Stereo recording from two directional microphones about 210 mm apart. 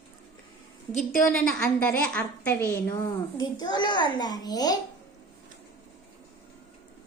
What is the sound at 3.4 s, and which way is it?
A child's voice, 20° left (ahead or behind).